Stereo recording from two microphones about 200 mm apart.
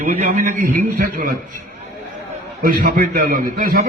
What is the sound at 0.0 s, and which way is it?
A man's voice, 40° right (ahead or behind).